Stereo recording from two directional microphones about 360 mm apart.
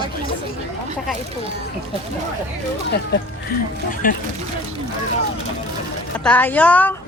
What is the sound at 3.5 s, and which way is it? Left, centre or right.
Speech, left.